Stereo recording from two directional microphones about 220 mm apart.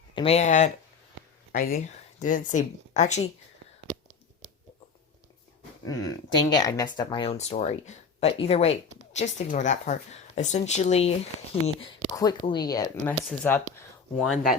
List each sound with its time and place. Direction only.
0.1 s speech: 25° left (ahead or behind)
5.8 s speech: 15° left (ahead or behind)
13.2 s speech: 5° left (ahead or behind)